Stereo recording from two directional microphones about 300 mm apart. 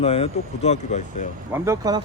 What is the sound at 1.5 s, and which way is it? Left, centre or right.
Speech, centre.